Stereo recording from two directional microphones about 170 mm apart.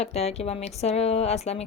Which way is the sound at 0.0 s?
40° left (ahead or behind).